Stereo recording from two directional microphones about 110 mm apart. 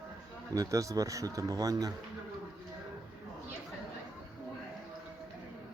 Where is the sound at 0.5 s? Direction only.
30° right (ahead or behind).